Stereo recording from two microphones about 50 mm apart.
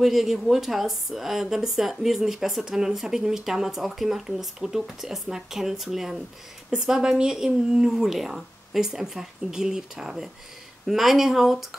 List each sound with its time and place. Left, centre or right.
0.0 s a woman's voice: centre